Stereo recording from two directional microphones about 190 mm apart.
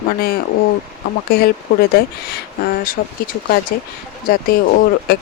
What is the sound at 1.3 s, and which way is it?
Speech, 55° left (ahead or behind).